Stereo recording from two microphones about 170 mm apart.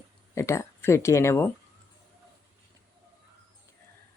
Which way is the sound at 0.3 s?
15° left (ahead or behind).